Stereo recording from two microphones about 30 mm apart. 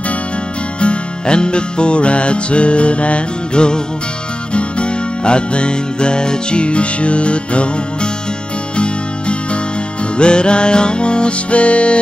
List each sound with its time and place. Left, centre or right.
0.7 s music: left